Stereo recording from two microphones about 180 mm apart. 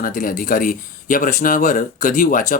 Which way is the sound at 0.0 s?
50° left (ahead or behind).